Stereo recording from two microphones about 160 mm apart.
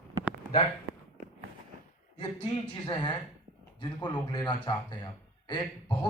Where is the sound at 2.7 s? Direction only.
25° left (ahead or behind).